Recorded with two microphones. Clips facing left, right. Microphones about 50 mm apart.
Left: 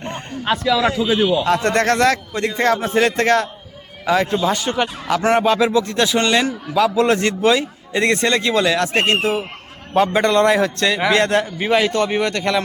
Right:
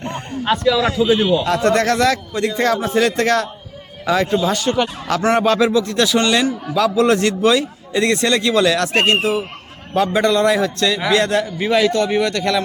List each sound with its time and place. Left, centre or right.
0.4 s a man's voice: centre
1.5 s a man's voice: left
2.5 s a man's voice: left
4.3 s a man's voice: centre
4.5 s a man's voice: left
5.7 s a man's voice: left
9.9 s a man's voice: left